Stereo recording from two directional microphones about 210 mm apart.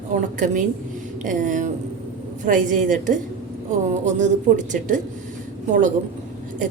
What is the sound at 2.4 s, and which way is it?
A woman's voice, 40° right (ahead or behind).